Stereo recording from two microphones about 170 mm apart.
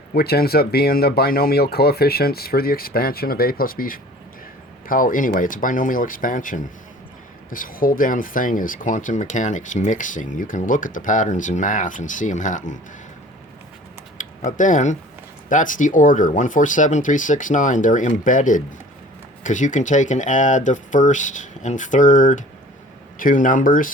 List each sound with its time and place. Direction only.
0.1 s speech: 65° left (ahead or behind); by 12.7 s 45° left (ahead or behind)
14.2 s speech: 50° left (ahead or behind)